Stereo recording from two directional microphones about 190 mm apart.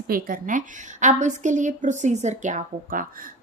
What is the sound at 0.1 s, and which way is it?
A woman's voice, 45° right (ahead or behind).